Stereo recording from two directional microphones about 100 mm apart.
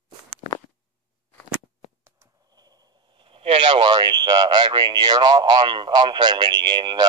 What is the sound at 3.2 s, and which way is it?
Speech, 65° right (ahead or behind).